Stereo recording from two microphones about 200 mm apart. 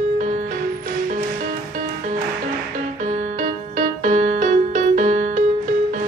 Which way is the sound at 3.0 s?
35° right (ahead or behind).